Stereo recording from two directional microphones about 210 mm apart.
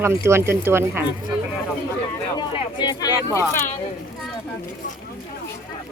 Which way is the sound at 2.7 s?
20° left (ahead or behind).